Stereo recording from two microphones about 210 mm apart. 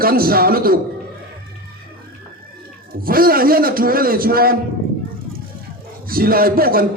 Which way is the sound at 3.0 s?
45° right (ahead or behind).